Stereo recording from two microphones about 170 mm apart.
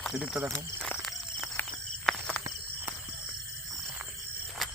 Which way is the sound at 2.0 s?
5° left (ahead or behind).